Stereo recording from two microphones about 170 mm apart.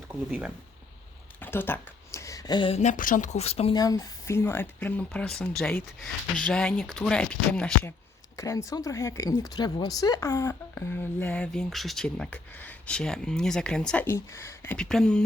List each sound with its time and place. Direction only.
0.1 s speech: 10° right (ahead or behind)
1.4 s speech: 10° left (ahead or behind); by 3.8 s 35° left (ahead or behind)
3.8 s speech: 20° left (ahead or behind)
8.4 s speech: 20° left (ahead or behind)